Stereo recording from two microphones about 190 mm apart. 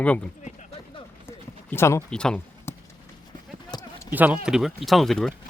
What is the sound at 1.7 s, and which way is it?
Speech, 15° left (ahead or behind).